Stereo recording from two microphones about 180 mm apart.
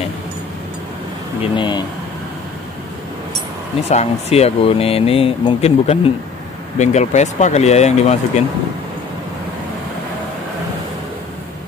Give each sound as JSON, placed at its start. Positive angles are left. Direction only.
{"t": 1.4, "sound": "speech", "side_deg": 25}
{"t": 3.9, "sound": "speech", "side_deg": 35}